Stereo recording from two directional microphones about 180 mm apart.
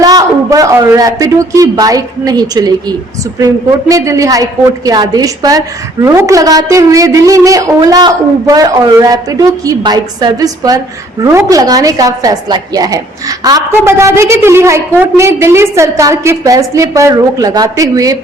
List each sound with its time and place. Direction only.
0.0 s a woman's voice: 20° right (ahead or behind)